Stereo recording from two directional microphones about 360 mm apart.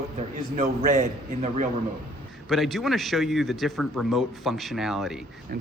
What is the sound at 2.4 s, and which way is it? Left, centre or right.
A man's voice, centre.